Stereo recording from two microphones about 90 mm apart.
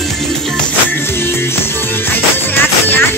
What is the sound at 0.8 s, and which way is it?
Music, 25° left (ahead or behind).